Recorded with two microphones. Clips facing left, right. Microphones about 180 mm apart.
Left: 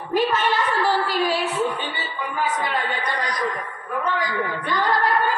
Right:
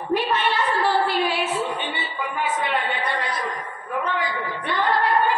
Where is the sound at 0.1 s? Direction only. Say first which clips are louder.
Left 2 dB; 40° left (ahead or behind).